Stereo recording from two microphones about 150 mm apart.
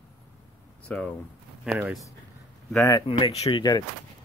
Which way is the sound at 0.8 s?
10° left (ahead or behind).